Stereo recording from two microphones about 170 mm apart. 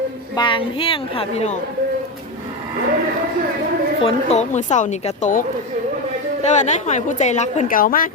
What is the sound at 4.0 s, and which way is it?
A woman's voice, 35° left (ahead or behind).